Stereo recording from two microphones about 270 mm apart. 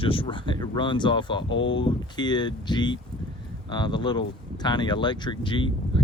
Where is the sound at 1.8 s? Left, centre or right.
Centre.